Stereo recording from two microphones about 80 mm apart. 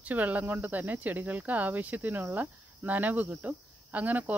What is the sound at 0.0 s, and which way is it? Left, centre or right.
Speech, centre.